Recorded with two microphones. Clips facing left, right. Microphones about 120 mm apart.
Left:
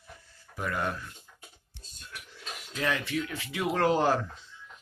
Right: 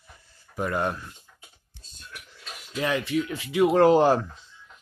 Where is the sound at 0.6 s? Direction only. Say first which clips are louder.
Right 5 dB; 30° right (ahead or behind).